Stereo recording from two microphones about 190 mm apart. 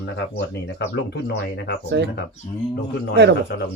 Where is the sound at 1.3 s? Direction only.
60° left (ahead or behind).